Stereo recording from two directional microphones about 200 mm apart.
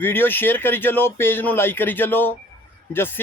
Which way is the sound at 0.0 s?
10° left (ahead or behind).